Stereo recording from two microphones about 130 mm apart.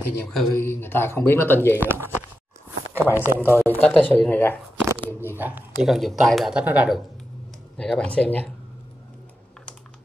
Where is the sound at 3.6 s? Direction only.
15° left (ahead or behind).